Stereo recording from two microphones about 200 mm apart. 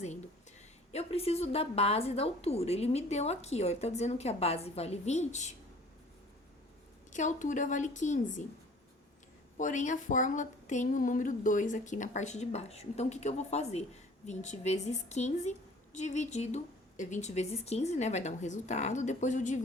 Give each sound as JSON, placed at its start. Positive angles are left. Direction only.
{"t": 0.9, "sound": "a woman's voice", "side_deg": 30}
{"t": 7.1, "sound": "a woman's voice", "side_deg": 40}
{"t": 9.6, "sound": "a woman's voice", "side_deg": 40}